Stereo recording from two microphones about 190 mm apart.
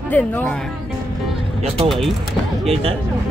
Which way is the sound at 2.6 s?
30° right (ahead or behind).